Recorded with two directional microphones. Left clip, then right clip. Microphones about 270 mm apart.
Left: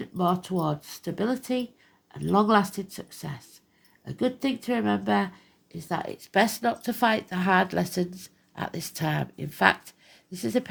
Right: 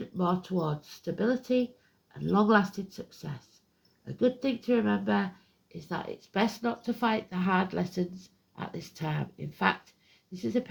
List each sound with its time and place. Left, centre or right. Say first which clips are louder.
0.0 s speech: left 4 dB; left